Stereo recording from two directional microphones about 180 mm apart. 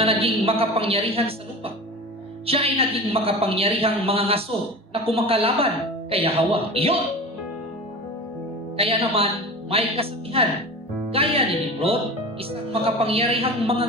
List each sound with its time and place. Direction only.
0.0 s a woman's voice: 30° right (ahead or behind)
8.7 s a woman's voice: 30° right (ahead or behind)
12.8 s a woman's voice: 30° right (ahead or behind)